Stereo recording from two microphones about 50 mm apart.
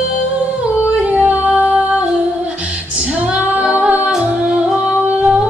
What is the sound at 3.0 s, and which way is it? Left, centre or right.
Female singing, right.